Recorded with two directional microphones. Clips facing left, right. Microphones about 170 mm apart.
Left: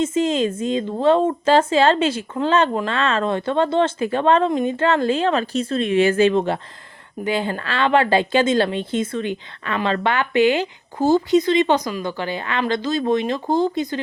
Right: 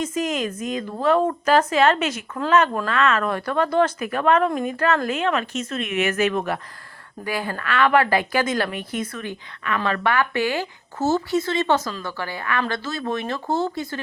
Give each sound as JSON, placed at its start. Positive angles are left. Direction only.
{"t": 0.0, "sound": "speech", "side_deg": 25}